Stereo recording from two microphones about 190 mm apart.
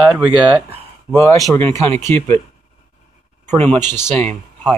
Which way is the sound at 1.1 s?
15° left (ahead or behind).